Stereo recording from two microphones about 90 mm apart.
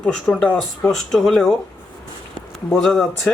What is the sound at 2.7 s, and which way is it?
Speech, 5° left (ahead or behind).